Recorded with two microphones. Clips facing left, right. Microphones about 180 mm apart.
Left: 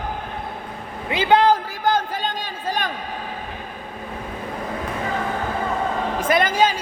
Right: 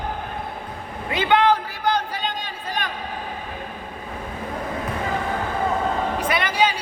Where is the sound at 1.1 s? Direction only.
30° left (ahead or behind); by 2.3 s 50° left (ahead or behind).